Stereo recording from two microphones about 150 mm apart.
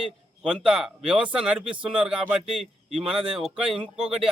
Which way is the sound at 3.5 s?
35° right (ahead or behind).